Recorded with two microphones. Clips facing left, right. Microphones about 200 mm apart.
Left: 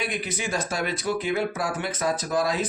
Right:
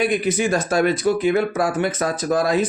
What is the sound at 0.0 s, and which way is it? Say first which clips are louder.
Speech: right 10 dB; 45° right (ahead or behind).